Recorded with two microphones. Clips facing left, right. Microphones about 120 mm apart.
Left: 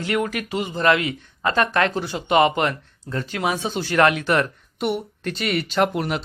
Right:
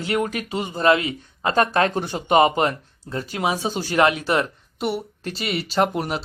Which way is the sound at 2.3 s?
35° right (ahead or behind).